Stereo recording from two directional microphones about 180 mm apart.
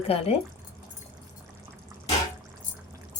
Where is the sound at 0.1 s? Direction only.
35° left (ahead or behind).